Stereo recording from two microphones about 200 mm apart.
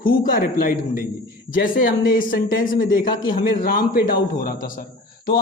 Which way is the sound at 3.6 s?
45° left (ahead or behind).